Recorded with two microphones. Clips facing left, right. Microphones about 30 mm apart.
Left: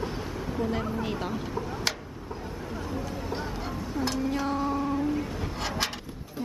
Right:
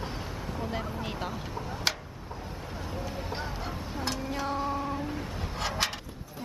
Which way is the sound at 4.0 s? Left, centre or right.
Centre.